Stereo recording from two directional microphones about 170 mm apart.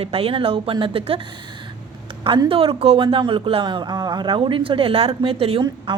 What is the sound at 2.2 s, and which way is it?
A man's voice, 30° right (ahead or behind).